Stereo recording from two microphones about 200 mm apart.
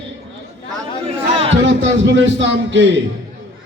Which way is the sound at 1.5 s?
65° right (ahead or behind).